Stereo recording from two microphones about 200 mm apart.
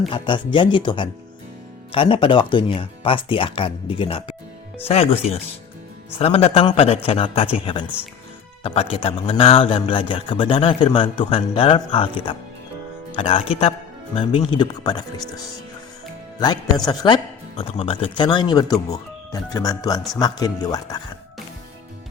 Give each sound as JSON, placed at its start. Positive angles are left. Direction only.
{"t": 0.1, "sound": "a man's voice", "side_deg": 25}
{"t": 16.4, "sound": "a man's voice", "side_deg": 20}